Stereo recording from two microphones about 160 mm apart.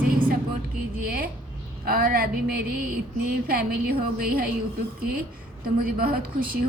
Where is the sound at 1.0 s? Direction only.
70° right (ahead or behind).